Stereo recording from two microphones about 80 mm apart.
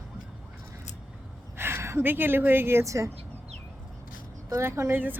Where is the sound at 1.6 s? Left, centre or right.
Right.